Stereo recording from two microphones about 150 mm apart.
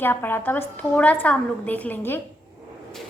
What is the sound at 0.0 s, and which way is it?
A woman's voice, 15° left (ahead or behind).